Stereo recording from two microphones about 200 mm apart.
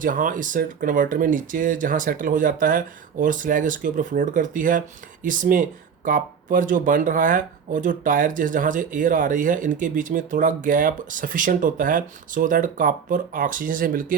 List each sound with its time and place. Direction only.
0.0 s speech: 40° right (ahead or behind)